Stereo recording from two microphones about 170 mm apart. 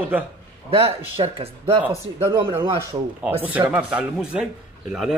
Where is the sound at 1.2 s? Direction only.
30° right (ahead or behind).